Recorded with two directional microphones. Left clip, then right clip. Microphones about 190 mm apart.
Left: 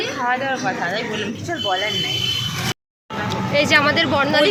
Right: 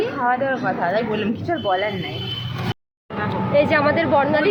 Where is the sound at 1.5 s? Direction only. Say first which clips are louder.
Right 1 dB; 20° right (ahead or behind).